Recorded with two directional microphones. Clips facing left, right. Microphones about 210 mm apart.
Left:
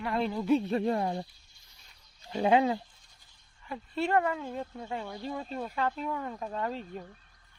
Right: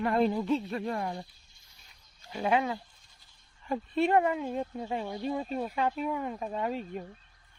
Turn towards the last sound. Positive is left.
turn(degrees=-15)  # may be behind; listen again after turning